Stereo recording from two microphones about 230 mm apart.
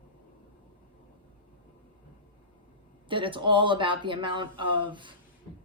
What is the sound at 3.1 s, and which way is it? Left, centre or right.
A woman's voice, right.